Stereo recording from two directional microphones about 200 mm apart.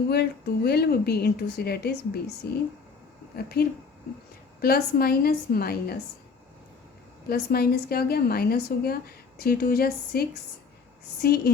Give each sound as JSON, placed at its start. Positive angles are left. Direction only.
{"t": 0.1, "sound": "a woman's voice", "side_deg": 55}
{"t": 7.3, "sound": "a woman's voice", "side_deg": 50}